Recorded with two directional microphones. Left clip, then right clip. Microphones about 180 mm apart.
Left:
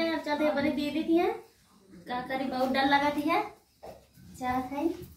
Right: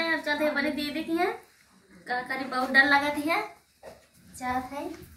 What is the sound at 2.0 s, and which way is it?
A woman's voice, centre (ahead or behind).